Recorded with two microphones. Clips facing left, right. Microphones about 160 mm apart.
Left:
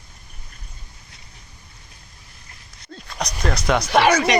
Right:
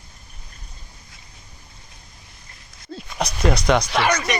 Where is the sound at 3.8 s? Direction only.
65° left (ahead or behind).